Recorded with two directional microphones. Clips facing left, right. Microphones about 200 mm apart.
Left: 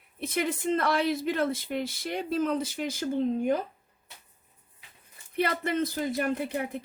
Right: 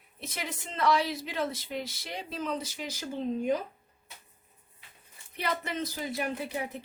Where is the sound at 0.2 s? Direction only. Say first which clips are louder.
Left 10 dB; 55° left (ahead or behind).